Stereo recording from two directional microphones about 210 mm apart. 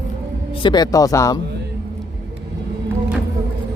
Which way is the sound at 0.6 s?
20° left (ahead or behind).